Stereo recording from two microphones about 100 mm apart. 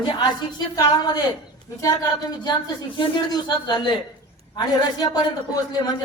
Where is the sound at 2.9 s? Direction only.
50° left (ahead or behind).